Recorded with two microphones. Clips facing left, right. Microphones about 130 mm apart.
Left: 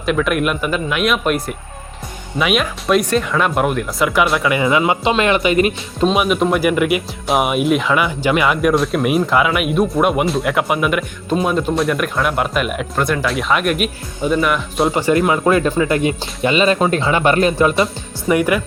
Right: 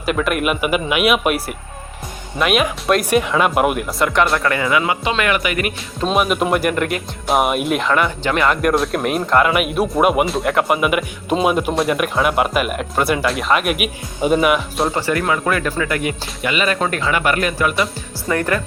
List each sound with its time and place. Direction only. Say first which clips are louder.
0.0 s speech: left 2 dB; 5° right (ahead or behind)
4.5 s speech: left 3 dB; 20° left (ahead or behind)
6.1 s speech: left 1 dB; centre (ahead or behind)
14.9 s speech: left 4 dB; 20° left (ahead or behind)
18.3 s speech: left 4 dB; 10° left (ahead or behind)